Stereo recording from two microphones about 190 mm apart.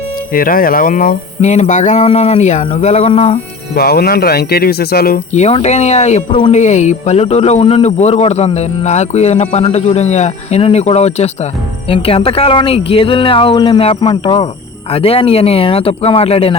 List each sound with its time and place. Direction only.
0.3 s speech: 50° left (ahead or behind); by 3.3 s 30° left (ahead or behind)
3.8 s speech: 55° left (ahead or behind)
5.3 s speech: 35° left (ahead or behind)